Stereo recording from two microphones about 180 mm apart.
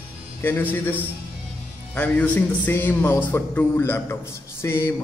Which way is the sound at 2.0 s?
10° left (ahead or behind).